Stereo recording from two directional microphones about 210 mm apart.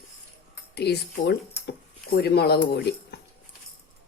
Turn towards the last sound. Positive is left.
turn(degrees=50)  # may be behind; listen again after turning